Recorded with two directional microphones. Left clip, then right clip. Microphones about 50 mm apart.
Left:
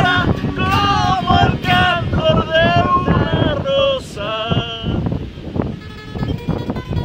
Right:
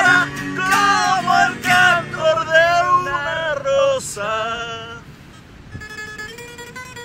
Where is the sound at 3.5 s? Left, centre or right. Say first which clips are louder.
Right 1 dB; right.